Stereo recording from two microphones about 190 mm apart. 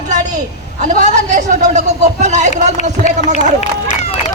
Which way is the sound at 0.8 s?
40° right (ahead or behind).